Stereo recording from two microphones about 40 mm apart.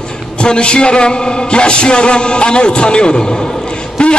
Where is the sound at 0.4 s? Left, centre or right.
Left.